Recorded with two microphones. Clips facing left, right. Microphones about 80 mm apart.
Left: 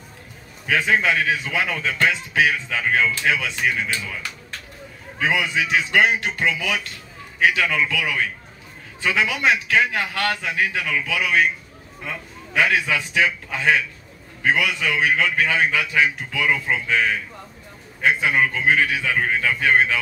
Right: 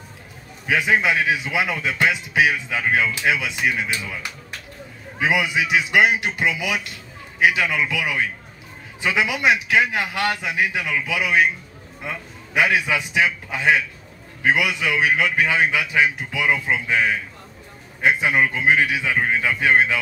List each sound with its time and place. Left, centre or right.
0.7 s a man's voice: centre